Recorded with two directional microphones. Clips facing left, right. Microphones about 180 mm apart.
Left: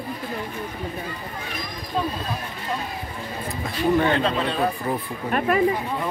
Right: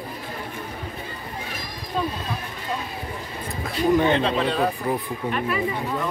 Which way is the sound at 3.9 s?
15° right (ahead or behind).